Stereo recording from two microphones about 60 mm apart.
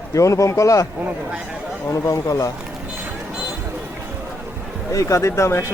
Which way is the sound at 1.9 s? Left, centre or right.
Left.